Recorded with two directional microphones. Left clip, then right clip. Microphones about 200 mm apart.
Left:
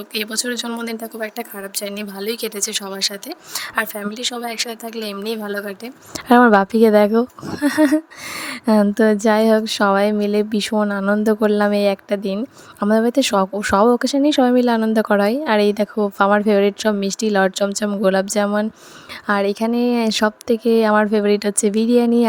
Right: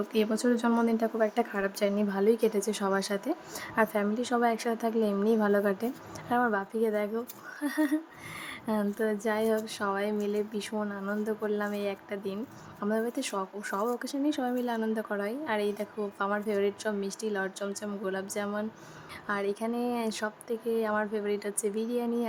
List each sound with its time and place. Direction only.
0.1 s speech: 50° left (ahead or behind)
1.0 s speech: centre (ahead or behind)
2.2 s speech: 50° left (ahead or behind)
5.4 s speech: centre (ahead or behind)
6.1 s speech: 50° left (ahead or behind)